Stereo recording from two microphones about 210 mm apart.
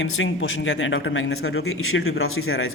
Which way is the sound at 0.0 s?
70° left (ahead or behind).